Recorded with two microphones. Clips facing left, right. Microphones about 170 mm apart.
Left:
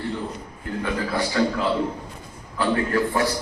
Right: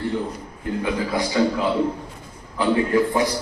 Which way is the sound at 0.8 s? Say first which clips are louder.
Right 1 dB; 15° right (ahead or behind).